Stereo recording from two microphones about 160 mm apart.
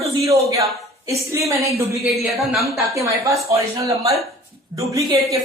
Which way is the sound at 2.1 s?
Centre (ahead or behind).